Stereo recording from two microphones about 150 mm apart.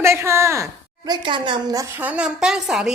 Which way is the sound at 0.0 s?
15° right (ahead or behind).